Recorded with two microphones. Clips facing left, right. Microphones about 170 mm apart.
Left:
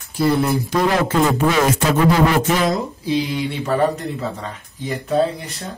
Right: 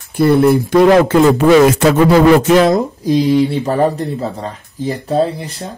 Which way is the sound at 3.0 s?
40° right (ahead or behind).